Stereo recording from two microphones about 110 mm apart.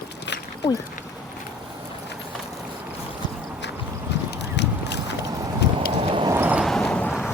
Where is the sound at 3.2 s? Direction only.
40° left (ahead or behind).